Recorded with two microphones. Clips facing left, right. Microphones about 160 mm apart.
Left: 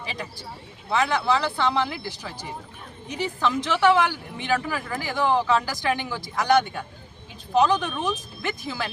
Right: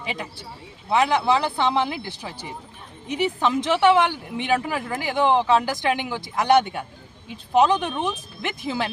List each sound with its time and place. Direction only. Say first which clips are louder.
0.0 s speech: right 2 dB; 20° right (ahead or behind)
3.1 s speech: right 3 dB; 20° right (ahead or behind)